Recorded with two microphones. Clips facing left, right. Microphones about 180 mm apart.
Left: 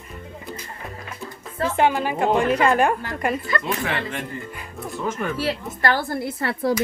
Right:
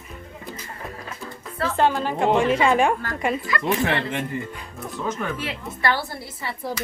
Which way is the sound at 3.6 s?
20° right (ahead or behind).